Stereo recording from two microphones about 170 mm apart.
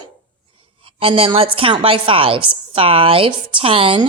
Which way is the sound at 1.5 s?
30° right (ahead or behind).